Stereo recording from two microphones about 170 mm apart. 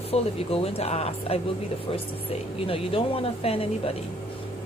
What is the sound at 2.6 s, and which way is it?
A woman's voice, 35° left (ahead or behind).